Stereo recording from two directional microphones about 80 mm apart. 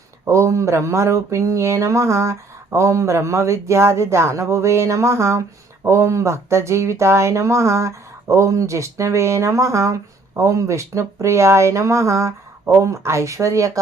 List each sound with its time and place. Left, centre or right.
0.3 s speech: right